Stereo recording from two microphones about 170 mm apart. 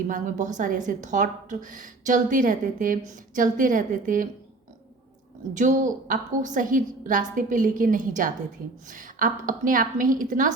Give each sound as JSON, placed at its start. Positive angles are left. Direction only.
{"t": 0.1, "sound": "a woman's voice", "side_deg": -50}
{"t": 5.5, "sound": "a woman's voice", "side_deg": -50}